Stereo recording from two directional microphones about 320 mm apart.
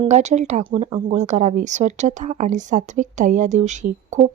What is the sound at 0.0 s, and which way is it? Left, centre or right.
A woman's voice, right.